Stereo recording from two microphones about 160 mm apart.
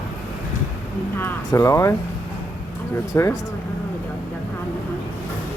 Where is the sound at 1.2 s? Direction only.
15° left (ahead or behind).